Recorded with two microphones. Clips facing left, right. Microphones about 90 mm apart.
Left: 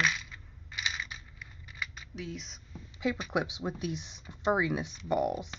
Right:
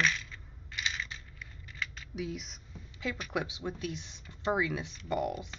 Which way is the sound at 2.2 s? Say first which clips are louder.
Right 3 dB; 5° right (ahead or behind).